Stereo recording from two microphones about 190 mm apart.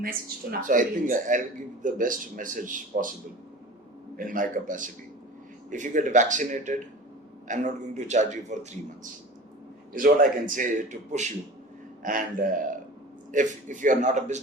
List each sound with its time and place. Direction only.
0.0 s a man's voice: 50° right (ahead or behind)
4.2 s a man's voice: 45° right (ahead or behind)
9.9 s a man's voice: 45° right (ahead or behind)